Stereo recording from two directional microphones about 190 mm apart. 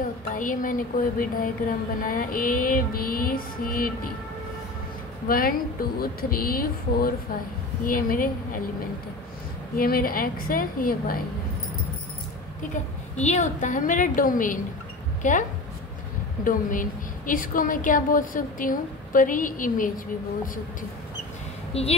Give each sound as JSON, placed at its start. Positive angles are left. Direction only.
{"t": 0.3, "sound": "a woman's voice", "side_deg": 45}
{"t": 5.3, "sound": "a woman's voice", "side_deg": 50}
{"t": 9.8, "sound": "a woman's voice", "side_deg": 50}
{"t": 13.1, "sound": "a woman's voice", "side_deg": 35}
{"t": 16.4, "sound": "a woman's voice", "side_deg": 45}
{"t": 21.7, "sound": "a woman's voice", "side_deg": 30}